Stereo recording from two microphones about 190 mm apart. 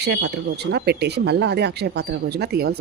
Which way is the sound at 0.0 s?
60° right (ahead or behind).